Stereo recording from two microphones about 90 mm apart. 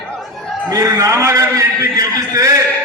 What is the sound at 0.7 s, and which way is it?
A man's voice, 40° right (ahead or behind).